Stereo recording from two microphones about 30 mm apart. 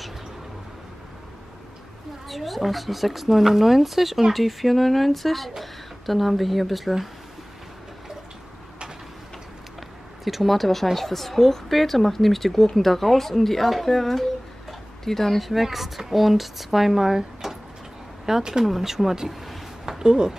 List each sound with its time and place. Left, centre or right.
2.2 s speech: centre
10.2 s speech: centre
15.4 s speech: centre
19.9 s speech: right